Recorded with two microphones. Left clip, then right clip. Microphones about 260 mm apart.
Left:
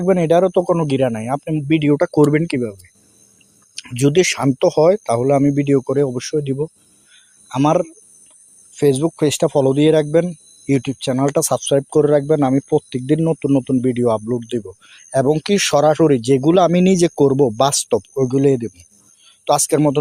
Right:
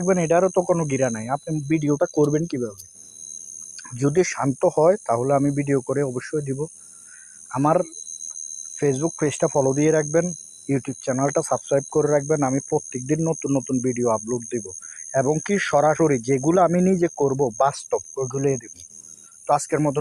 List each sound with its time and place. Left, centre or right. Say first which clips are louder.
0.0 s speech: left 5 dB; left
4.0 s speech: left 6 dB; left